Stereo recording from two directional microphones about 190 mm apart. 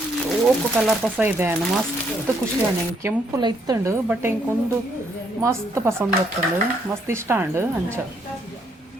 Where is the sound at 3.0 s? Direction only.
20° right (ahead or behind).